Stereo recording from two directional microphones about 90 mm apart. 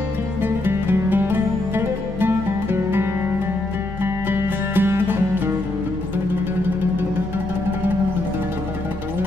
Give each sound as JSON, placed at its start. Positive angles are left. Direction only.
{"t": 0.4, "sound": "music", "side_deg": -25}